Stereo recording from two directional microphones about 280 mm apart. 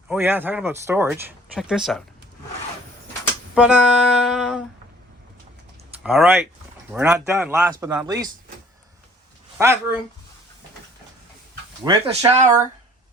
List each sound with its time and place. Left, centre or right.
0.1 s speech: centre
3.5 s music: centre
6.0 s music: centre
6.9 s speech: centre
9.6 s speech: centre
11.9 s speech: centre